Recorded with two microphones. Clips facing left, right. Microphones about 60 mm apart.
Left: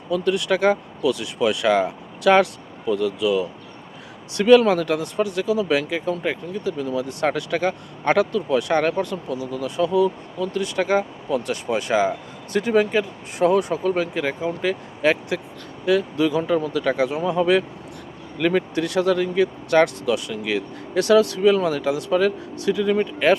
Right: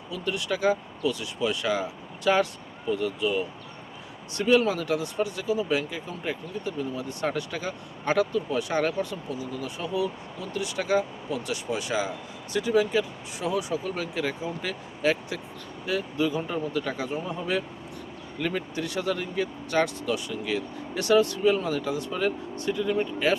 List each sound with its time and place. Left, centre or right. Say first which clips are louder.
0.1 s speech: left 9 dB; left